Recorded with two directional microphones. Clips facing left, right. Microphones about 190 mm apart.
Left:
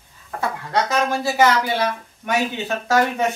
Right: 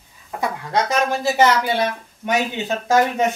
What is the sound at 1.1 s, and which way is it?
Speech, 20° right (ahead or behind).